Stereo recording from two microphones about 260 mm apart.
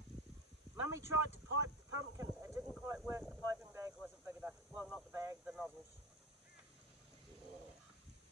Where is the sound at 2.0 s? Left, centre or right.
Centre.